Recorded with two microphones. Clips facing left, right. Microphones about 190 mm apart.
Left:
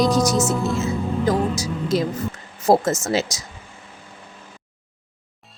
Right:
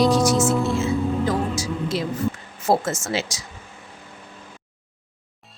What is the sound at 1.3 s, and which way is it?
Music, 40° left (ahead or behind).